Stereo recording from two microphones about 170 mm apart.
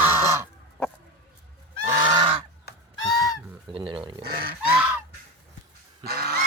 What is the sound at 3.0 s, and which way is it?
Goose, 20° left (ahead or behind).